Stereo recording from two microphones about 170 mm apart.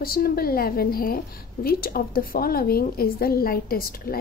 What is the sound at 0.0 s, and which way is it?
A woman's voice, 60° left (ahead or behind).